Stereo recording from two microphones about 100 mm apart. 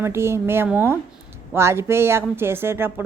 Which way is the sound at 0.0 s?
25° right (ahead or behind).